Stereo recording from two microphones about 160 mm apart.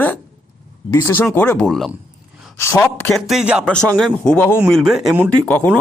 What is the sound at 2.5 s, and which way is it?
Speech, 15° left (ahead or behind).